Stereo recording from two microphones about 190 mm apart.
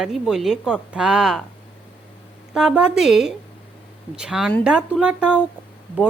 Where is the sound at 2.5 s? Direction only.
5° right (ahead or behind).